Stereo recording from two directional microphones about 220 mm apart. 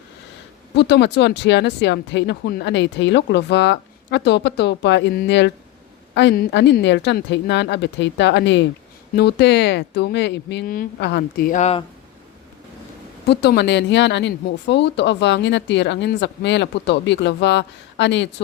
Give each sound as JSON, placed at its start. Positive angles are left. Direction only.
{"t": 0.8, "sound": "speech", "side_deg": 50}
{"t": 13.2, "sound": "speech", "side_deg": 50}